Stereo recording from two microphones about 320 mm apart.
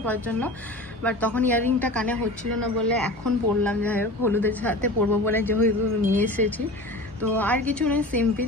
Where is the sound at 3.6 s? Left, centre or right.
Centre.